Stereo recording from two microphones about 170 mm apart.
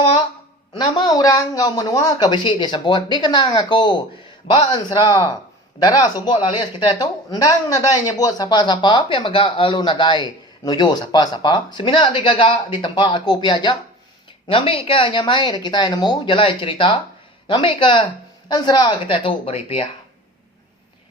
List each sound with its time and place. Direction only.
0.8 s speech: 25° left (ahead or behind)